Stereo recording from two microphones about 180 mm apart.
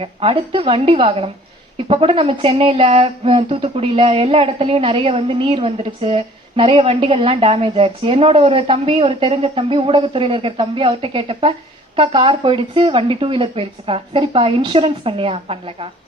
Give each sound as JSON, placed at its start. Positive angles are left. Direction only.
{"t": 0.0, "sound": "speech", "side_deg": -30}